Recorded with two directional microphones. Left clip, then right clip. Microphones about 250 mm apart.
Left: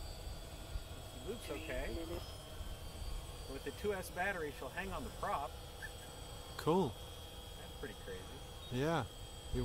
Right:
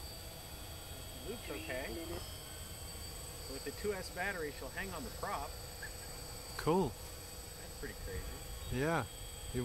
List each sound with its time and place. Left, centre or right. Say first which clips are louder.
1.5 s speech: right 2 dB; left
3.9 s speech: left 1 dB; centre
6.5 s hum: right 1 dB; centre
8.7 s speech: right 2 dB; centre